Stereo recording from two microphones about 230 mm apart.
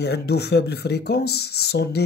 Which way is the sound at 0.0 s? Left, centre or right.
Left.